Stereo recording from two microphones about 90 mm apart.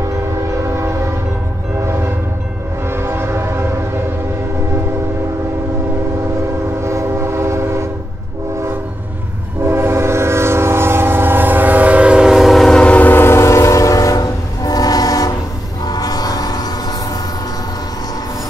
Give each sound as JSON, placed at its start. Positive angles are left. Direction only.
{"t": 0.6, "sound": "train", "side_deg": -35}
{"t": 1.8, "sound": "train horn", "side_deg": -30}
{"t": 2.9, "sound": "train", "side_deg": -25}
{"t": 6.8, "sound": "train", "side_deg": -30}
{"t": 9.6, "sound": "train", "side_deg": -30}